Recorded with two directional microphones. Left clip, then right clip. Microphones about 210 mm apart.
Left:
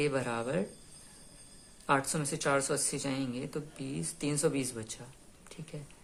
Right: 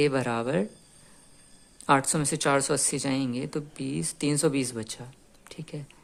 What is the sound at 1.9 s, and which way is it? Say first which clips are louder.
A woman's voice: right 7 dB; 40° right (ahead or behind).